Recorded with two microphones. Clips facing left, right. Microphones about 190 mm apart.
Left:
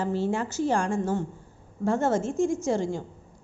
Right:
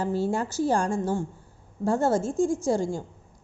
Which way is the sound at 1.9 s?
35° right (ahead or behind).